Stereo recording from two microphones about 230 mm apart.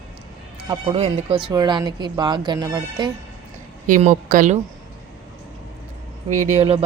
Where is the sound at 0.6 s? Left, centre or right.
Centre.